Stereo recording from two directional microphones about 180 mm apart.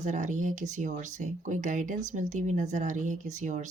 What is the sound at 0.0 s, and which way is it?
Speech, 40° right (ahead or behind).